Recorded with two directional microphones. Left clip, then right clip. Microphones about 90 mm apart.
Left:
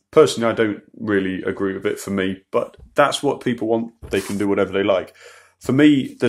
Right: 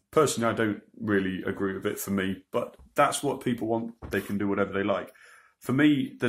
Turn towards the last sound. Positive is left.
turn(degrees=50)  # may be behind; listen again after turning